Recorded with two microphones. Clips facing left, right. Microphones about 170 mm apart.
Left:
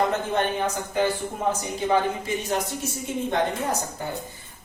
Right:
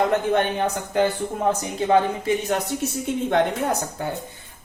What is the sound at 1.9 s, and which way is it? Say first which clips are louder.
Speech: right 4 dB; 60° right (ahead or behind).